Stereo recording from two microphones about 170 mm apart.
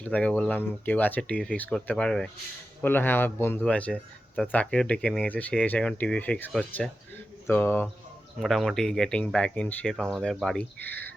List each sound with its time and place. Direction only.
0.0 s speech: 5° left (ahead or behind)
8.4 s speech: centre (ahead or behind)